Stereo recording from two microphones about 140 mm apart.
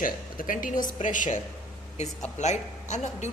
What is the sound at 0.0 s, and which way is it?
A woman's voice, 80° left.